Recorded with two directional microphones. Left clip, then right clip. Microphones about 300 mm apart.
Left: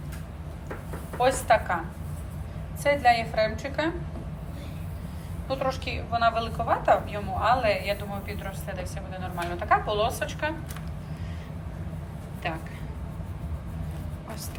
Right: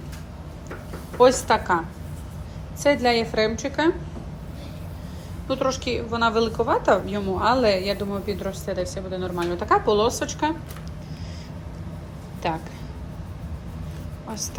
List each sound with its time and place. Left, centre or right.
1.2 s a woman's voice: right
2.8 s a woman's voice: right
5.5 s a woman's voice: right